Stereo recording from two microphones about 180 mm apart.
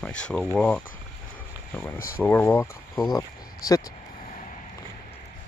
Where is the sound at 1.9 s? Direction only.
55° left (ahead or behind).